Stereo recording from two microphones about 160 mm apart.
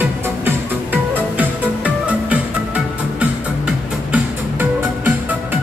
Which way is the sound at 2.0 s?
10° right (ahead or behind).